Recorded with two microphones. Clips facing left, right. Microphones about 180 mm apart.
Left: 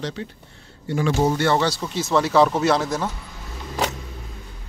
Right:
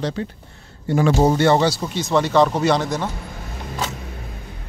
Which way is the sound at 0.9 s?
45° right (ahead or behind).